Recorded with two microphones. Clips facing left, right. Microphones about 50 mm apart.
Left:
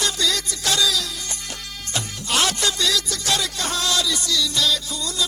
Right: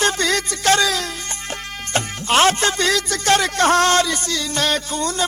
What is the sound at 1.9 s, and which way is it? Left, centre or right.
Speech, right.